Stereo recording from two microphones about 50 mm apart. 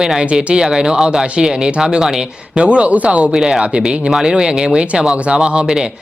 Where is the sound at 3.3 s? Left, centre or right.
Centre.